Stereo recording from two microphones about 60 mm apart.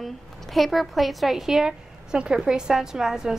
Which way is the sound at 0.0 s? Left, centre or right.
Centre.